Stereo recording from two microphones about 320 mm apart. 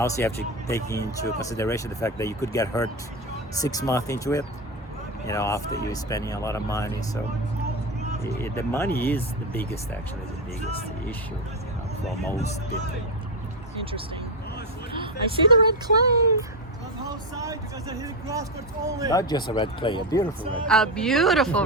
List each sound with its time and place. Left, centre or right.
0.0 s speech: centre
8.4 s speech: centre
12.0 s speech: centre
14.9 s speech: centre
19.1 s speech: centre
20.7 s speech: centre